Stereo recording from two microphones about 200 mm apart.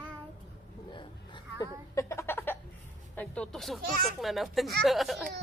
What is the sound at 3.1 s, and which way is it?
Music, 5° left (ahead or behind).